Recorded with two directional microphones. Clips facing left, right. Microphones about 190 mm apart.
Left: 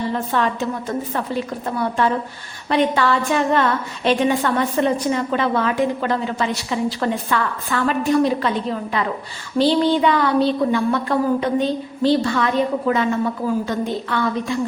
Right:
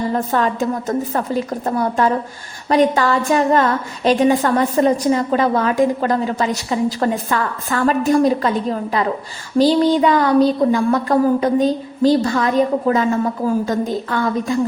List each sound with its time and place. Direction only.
0.1 s a woman's voice: 40° right (ahead or behind)